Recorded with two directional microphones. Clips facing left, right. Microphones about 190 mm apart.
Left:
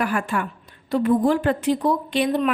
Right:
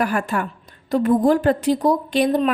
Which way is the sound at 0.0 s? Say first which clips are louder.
Right 2 dB; 40° right (ahead or behind).